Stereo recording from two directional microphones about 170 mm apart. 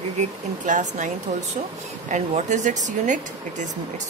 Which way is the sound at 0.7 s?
45° right (ahead or behind).